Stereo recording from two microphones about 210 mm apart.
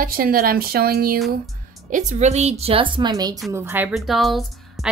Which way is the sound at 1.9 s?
30° right (ahead or behind).